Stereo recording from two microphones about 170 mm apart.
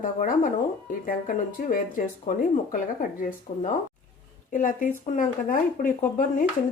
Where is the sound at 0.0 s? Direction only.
55° left (ahead or behind).